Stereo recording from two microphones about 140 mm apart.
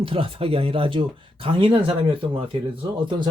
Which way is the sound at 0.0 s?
40° right (ahead or behind).